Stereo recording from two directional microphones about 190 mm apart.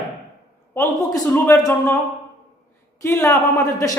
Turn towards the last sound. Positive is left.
turn(degrees=15)  # may be behind; listen again after turning